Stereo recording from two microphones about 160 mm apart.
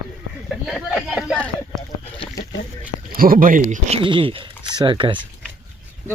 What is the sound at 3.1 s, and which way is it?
Speech, 65° right (ahead or behind).